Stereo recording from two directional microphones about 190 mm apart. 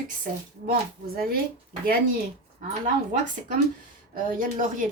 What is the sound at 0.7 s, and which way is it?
Speech, 50° right (ahead or behind).